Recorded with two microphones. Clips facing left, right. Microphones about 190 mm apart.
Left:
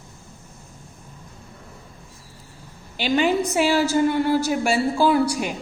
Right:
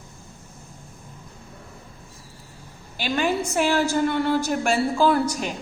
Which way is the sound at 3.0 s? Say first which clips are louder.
Left 4 dB; 15° left (ahead or behind).